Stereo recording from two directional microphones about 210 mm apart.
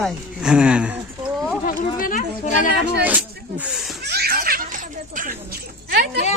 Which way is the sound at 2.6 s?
55° right (ahead or behind).